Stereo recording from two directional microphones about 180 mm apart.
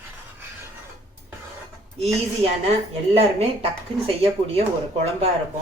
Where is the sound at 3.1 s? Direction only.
35° right (ahead or behind).